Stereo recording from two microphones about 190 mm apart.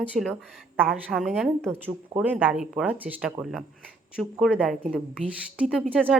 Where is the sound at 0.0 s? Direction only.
5° right (ahead or behind).